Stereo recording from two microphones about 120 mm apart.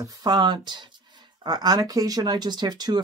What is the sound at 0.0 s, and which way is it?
Speech, 35° right (ahead or behind).